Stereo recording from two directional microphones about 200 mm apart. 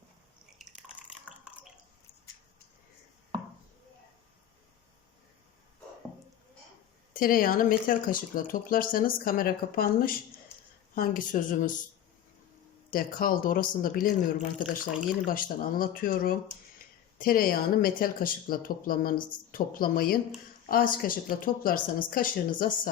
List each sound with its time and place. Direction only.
0.6 s drip: centre (ahead or behind)
7.1 s speech: 45° left (ahead or behind)
12.9 s speech: 45° left (ahead or behind)